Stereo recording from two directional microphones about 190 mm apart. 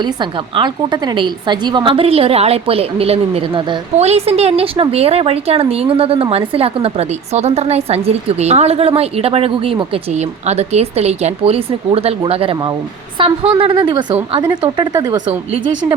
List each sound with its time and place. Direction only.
0.0 s a woman's voice: 25° right (ahead or behind)